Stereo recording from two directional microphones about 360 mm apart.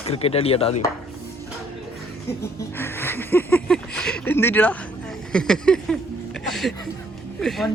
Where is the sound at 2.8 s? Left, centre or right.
Centre.